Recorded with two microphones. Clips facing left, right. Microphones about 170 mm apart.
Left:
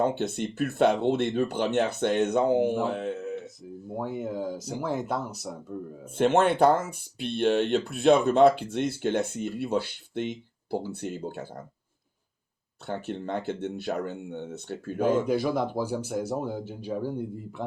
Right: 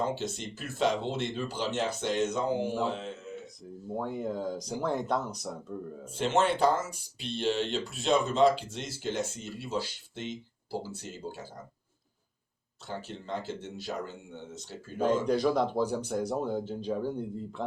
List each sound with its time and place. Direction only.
0.0 s a man's voice: 60° left (ahead or behind)
3.9 s speech: 5° left (ahead or behind)
6.1 s speech: 55° left (ahead or behind)
12.9 s speech: 60° left (ahead or behind)
15.3 s speech: 5° left (ahead or behind)